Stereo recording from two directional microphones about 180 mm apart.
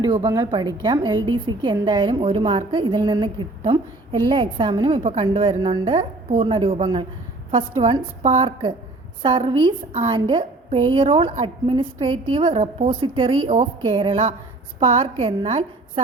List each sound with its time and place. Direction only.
0.0 s a woman's voice: 25° right (ahead or behind)